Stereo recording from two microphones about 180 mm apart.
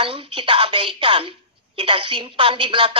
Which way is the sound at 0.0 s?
30° right (ahead or behind).